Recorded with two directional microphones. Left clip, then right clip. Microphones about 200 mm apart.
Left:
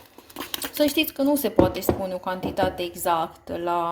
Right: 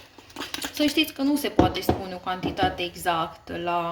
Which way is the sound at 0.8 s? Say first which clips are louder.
Left 2 dB; 45° left (ahead or behind).